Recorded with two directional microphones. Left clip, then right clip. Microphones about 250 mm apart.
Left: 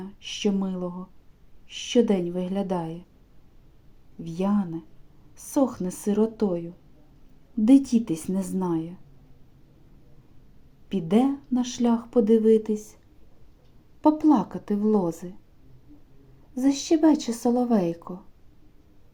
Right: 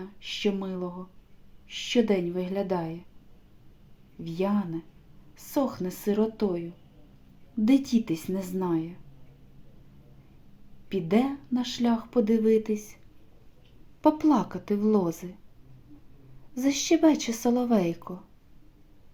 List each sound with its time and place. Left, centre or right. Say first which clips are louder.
0.0 s speech: left 1 dB; left
4.2 s speech: left 1 dB; left
10.8 s speech: left 3 dB; left
14.0 s speech: left 2 dB; centre
16.6 s speech: left 2 dB; centre